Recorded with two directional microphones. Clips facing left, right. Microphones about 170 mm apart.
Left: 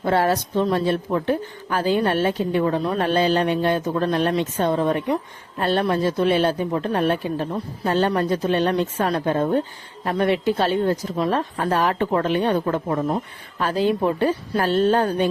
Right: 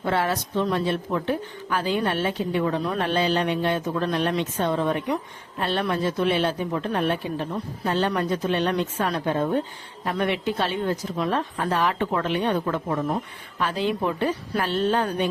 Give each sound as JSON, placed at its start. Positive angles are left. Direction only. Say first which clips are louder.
{"t": 0.0, "sound": "a woman's voice", "louder": "left 5 dB", "side_deg": 40}